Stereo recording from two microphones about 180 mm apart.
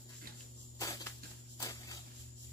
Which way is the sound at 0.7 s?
20° left (ahead or behind).